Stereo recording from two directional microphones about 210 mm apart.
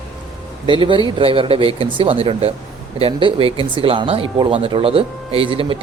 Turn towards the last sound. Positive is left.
turn(degrees=-25)  # may be behind; listen again after turning